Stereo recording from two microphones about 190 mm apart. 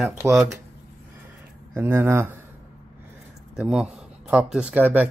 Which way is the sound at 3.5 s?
5° right (ahead or behind).